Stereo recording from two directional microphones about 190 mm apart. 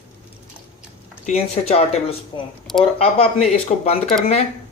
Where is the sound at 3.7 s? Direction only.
35° left (ahead or behind).